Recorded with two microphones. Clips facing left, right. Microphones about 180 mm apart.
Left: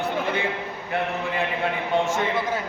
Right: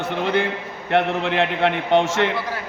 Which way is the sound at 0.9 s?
80° right.